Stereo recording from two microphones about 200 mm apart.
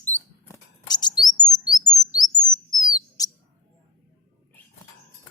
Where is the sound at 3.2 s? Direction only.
20° left (ahead or behind).